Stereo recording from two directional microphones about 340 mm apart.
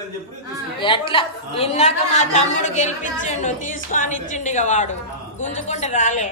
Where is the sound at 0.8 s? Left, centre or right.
Centre.